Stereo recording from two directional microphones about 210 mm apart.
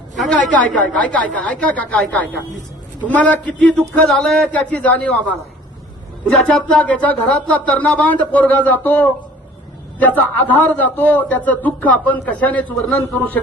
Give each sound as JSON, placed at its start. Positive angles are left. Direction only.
{"t": 0.2, "sound": "a woman's voice", "side_deg": 0}
{"t": 10.2, "sound": "a man's voice", "side_deg": 10}